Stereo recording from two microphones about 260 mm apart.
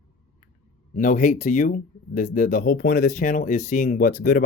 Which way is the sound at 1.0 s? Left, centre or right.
Left.